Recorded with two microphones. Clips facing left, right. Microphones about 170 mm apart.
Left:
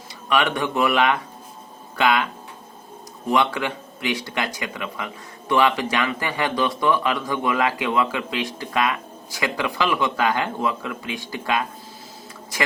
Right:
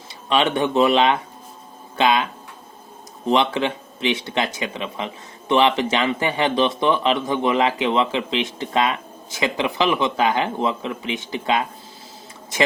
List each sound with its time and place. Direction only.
0.3 s speech: 25° right (ahead or behind)
3.2 s speech: 25° right (ahead or behind)